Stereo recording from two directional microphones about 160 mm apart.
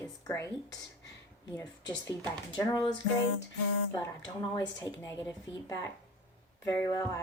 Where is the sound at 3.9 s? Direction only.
25° left (ahead or behind).